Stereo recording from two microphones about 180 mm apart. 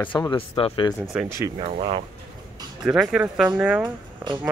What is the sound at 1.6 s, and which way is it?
Speech, 35° right (ahead or behind).